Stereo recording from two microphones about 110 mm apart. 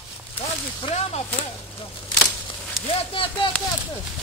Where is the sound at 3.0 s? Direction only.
55° left (ahead or behind).